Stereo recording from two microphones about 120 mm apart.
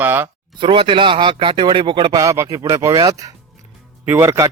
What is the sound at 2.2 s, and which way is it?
Speech, 25° right (ahead or behind).